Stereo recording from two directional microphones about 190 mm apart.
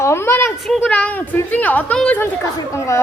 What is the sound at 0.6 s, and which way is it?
Speech, centre (ahead or behind).